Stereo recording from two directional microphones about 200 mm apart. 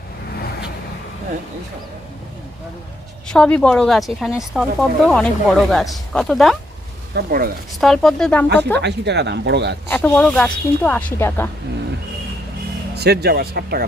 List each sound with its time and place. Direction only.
3.2 s speech: 5° left (ahead or behind)
7.1 s speech: 50° right (ahead or behind)
7.8 s speech: centre (ahead or behind)
8.8 s speech: 55° right (ahead or behind)
9.9 s a woman's voice: 5° left (ahead or behind)
13.0 s speech: 55° right (ahead or behind)